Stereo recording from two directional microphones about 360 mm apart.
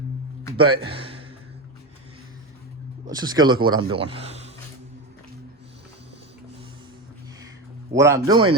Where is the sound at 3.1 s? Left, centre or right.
Centre.